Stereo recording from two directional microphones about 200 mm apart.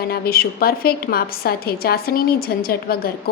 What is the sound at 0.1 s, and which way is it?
A woman's voice, 50° left (ahead or behind).